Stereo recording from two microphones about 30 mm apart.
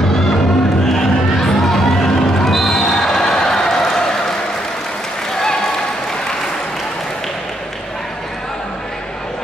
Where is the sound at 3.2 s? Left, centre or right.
Left.